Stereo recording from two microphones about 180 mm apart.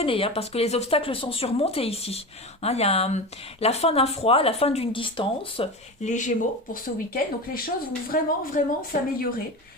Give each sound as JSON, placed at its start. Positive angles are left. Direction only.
{"t": 0.0, "sound": "speech", "side_deg": 30}